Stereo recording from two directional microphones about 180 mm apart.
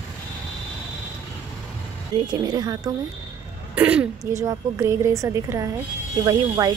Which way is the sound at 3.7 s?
5° right (ahead or behind).